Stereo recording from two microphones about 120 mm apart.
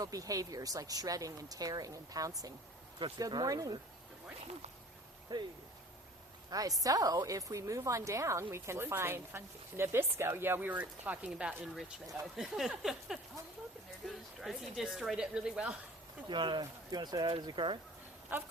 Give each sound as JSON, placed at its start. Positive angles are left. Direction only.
{"t": 0.0, "sound": "a woman's voice", "side_deg": -30}
{"t": 5.3, "sound": "speech", "side_deg": -35}
{"t": 6.5, "sound": "a woman's voice", "side_deg": -30}
{"t": 16.3, "sound": "speech", "side_deg": -40}
{"t": 18.3, "sound": "speech", "side_deg": -15}